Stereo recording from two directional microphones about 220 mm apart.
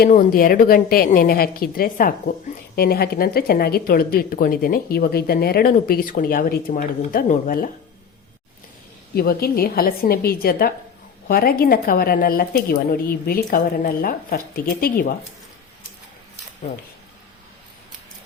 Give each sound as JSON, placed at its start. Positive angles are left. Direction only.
{"t": 0.0, "sound": "a woman's voice", "side_deg": 40}
{"t": 9.1, "sound": "speech", "side_deg": 45}